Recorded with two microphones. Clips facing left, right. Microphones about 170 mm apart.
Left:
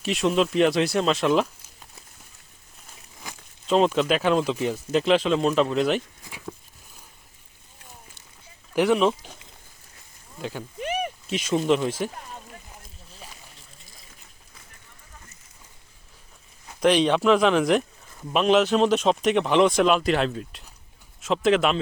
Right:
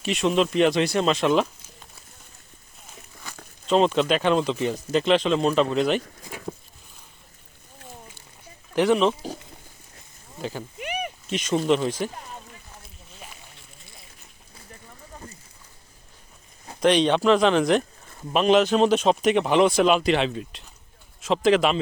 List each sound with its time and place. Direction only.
0.0 s speech: centre (ahead or behind)
3.7 s speech: 5° left (ahead or behind)
8.7 s speech: 5° left (ahead or behind)
10.8 s a sound: 35° left (ahead or behind)
11.3 s speech: 5° left (ahead or behind)
15.1 s a sound: 40° right (ahead or behind)
16.8 s speech: centre (ahead or behind)